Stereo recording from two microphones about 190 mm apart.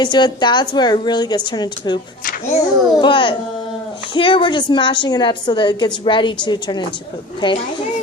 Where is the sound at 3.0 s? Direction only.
25° left (ahead or behind).